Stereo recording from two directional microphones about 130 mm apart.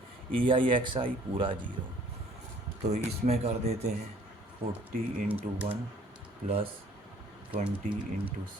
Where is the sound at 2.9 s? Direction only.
60° right (ahead or behind).